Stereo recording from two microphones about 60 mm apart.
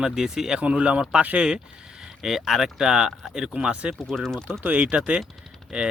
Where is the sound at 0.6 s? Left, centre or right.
Centre.